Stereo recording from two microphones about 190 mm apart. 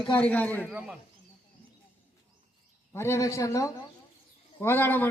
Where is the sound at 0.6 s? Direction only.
5° right (ahead or behind).